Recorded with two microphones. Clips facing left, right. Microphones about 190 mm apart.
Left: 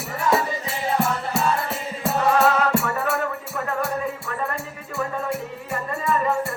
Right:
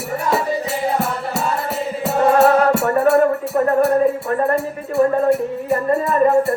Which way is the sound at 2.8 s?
45° right (ahead or behind).